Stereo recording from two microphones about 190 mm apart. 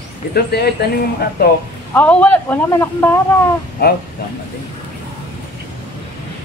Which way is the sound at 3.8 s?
60° left (ahead or behind).